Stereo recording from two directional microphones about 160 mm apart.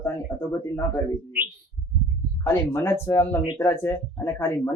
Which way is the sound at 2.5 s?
15° left (ahead or behind).